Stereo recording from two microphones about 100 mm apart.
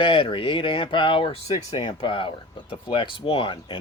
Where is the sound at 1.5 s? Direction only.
40° left (ahead or behind).